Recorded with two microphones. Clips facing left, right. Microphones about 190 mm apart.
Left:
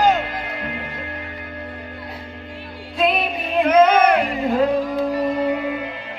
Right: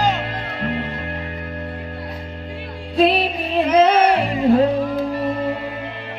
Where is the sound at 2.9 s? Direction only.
35° right (ahead or behind).